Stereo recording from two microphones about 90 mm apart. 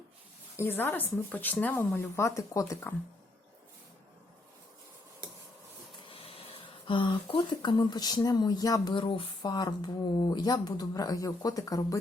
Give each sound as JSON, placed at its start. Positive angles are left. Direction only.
{"t": 0.5, "sound": "speech", "side_deg": 30}
{"t": 2.0, "sound": "speech", "side_deg": 30}
{"t": 6.1, "sound": "a sound", "side_deg": 90}
{"t": 6.8, "sound": "speech", "side_deg": 70}
{"t": 8.9, "sound": "speech", "side_deg": 75}
{"t": 9.5, "sound": "speech", "side_deg": 50}